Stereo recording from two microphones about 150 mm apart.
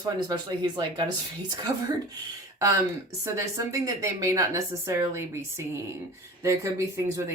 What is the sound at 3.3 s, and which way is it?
Speech, 20° right (ahead or behind).